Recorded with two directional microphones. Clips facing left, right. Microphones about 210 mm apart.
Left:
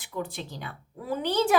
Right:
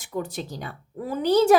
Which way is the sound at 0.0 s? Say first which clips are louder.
Right 4 dB; 45° right (ahead or behind).